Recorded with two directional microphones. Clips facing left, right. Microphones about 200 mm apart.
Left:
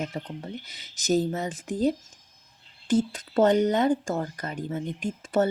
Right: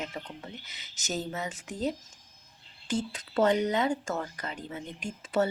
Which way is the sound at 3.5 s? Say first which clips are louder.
Left 5 dB; 50° left (ahead or behind).